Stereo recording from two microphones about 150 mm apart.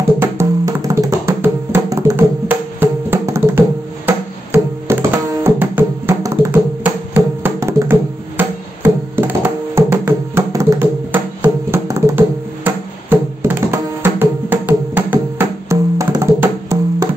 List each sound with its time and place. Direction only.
0.0 s music: 15° right (ahead or behind)